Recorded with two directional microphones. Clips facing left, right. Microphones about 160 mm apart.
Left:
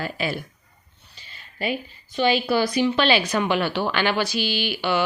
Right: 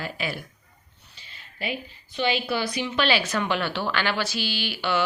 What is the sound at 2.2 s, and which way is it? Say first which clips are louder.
Speech: left 5 dB; 40° left (ahead or behind).